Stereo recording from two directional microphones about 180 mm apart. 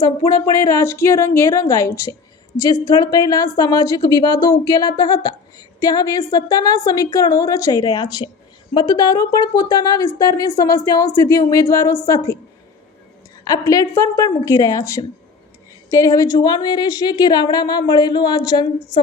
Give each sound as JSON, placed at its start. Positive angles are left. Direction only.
{"t": 0.0, "sound": "a woman's voice", "side_deg": 20}
{"t": 13.5, "sound": "a woman's voice", "side_deg": 20}